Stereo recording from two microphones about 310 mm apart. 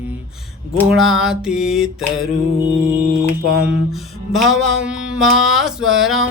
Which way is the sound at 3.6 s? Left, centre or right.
Centre.